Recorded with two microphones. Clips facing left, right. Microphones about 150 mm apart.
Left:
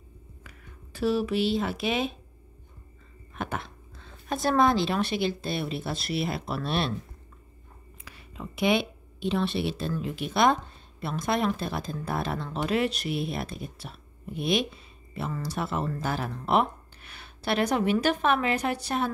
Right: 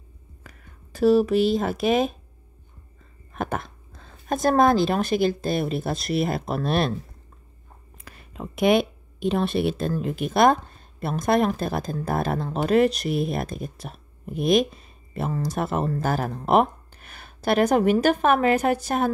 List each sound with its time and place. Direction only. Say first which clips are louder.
0.4 s speech: right 2 dB; 45° right (ahead or behind)
3.3 s a woman's voice: right 5 dB; 45° right (ahead or behind)
8.0 s speech: right 4 dB; 50° right (ahead or behind)